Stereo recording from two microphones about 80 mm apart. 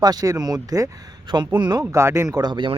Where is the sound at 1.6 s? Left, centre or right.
Right.